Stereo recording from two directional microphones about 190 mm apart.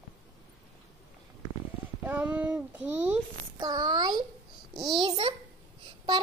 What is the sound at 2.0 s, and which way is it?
Child singing, 10° right (ahead or behind).